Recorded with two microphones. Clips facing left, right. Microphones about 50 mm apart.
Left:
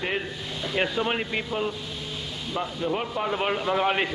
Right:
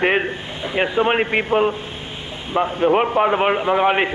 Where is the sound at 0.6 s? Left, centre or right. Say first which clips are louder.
Right 7 dB; right.